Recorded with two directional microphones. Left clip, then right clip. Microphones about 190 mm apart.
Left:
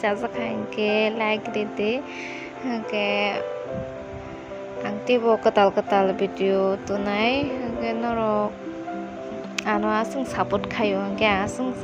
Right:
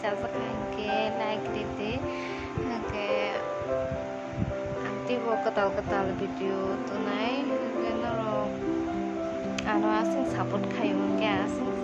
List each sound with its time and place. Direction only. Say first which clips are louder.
0.8 s a woman's voice: left 7 dB; 30° left (ahead or behind)
5.0 s speech: left 9 dB; 30° left (ahead or behind)
7.9 s music: left 5 dB; 30° left (ahead or behind)
9.6 s a woman's voice: left 3 dB; 30° left (ahead or behind)